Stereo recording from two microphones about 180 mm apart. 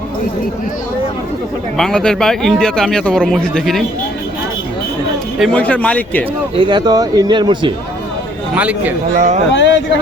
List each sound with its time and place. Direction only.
1.8 s a man's voice: 5° left (ahead or behind)
5.4 s speech: 5° left (ahead or behind)
6.6 s speech: 25° right (ahead or behind)
8.5 s speech: 10° right (ahead or behind)
9.1 s speech: 45° right (ahead or behind)
9.5 s speech: 90° left